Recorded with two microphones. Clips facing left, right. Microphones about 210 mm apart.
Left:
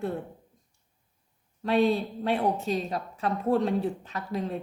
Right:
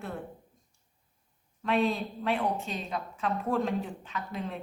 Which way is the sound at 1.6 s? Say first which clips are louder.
Left 4 dB; 35° left (ahead or behind).